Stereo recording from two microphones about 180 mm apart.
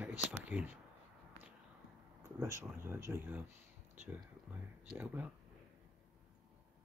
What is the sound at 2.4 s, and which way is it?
Speech, 15° right (ahead or behind).